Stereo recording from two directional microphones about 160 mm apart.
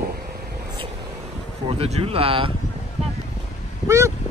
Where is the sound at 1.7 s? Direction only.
40° right (ahead or behind).